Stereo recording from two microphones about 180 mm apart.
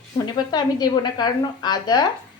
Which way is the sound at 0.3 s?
20° left (ahead or behind).